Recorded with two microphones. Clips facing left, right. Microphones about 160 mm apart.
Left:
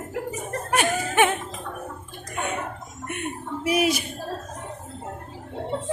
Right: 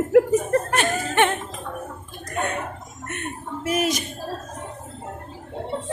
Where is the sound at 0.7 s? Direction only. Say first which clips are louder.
Even; 10° left (ahead or behind).